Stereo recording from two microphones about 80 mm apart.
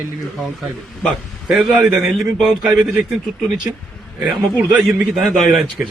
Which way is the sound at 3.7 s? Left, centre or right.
Right.